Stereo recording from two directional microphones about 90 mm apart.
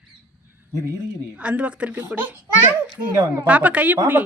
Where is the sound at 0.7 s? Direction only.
35° right (ahead or behind).